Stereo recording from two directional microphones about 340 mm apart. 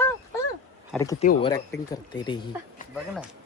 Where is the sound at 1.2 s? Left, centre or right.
Centre.